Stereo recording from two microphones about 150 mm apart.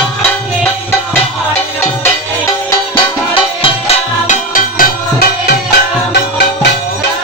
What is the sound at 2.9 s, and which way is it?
Music, 35° left (ahead or behind).